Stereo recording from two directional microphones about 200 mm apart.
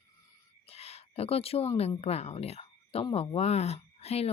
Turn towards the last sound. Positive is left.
turn(degrees=30)  # may be behind; listen again after turning